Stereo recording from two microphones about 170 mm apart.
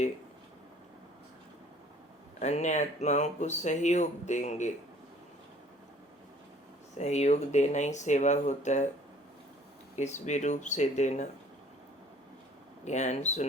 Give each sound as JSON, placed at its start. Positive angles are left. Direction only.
{"t": 2.4, "sound": "speech", "side_deg": 45}
{"t": 7.0, "sound": "speech", "side_deg": 40}
{"t": 9.9, "sound": "speech", "side_deg": 45}
{"t": 12.8, "sound": "speech", "side_deg": 45}